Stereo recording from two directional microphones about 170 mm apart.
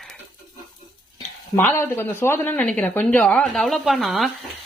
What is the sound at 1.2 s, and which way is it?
Speech, 15° left (ahead or behind).